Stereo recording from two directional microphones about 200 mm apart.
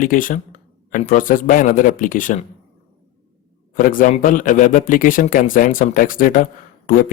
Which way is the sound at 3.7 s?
40° left (ahead or behind).